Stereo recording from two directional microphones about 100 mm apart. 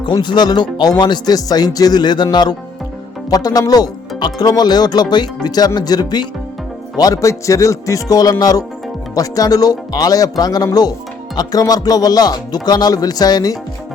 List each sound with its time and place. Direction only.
0.0 s speech: 50° left (ahead or behind)